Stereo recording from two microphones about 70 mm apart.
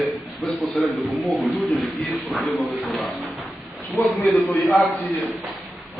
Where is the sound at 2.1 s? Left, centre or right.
Centre.